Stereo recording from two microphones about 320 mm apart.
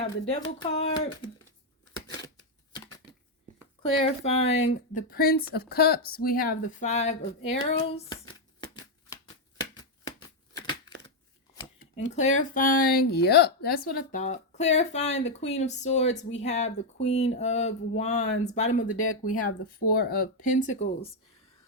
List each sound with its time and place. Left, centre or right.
0.0 s speech: centre
3.8 s speech: centre
9.7 s shuffling cards: centre
11.8 s speech: left
18.9 s speech: left
19.5 s speech: left